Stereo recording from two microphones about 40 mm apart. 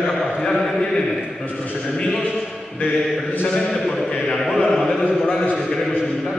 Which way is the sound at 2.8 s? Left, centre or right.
Left.